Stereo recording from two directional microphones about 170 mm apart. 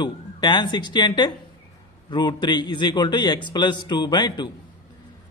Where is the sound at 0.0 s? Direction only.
25° left (ahead or behind).